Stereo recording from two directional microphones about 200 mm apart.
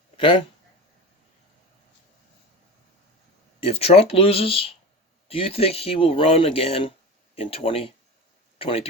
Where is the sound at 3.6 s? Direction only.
30° left (ahead or behind).